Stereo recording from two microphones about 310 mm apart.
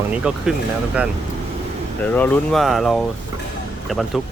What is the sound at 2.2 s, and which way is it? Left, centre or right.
Speech, centre.